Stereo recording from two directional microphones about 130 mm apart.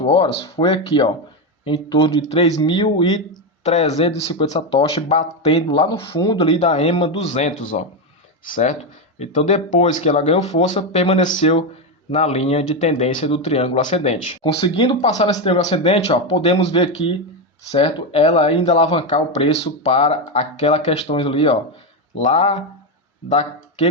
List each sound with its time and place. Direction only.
0.0 s speech: 40° left (ahead or behind)
3.6 s speech: 55° left (ahead or behind)
4.4 s speech: 60° left (ahead or behind); by 6.1 s 45° left (ahead or behind)
6.1 s speech: 30° left (ahead or behind)
6.4 s speech: 55° left (ahead or behind)
9.1 s speech: 60° left (ahead or behind)
13.2 s speech: 50° left (ahead or behind)